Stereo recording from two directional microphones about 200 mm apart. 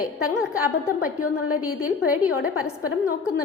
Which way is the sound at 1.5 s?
90° left.